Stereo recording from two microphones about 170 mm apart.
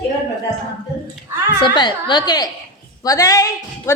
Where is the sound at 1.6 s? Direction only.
25° left (ahead or behind).